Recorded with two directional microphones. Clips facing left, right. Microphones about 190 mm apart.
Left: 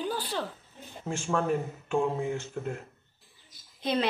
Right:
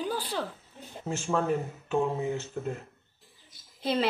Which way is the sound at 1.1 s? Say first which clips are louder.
Right 1 dB; 5° right (ahead or behind).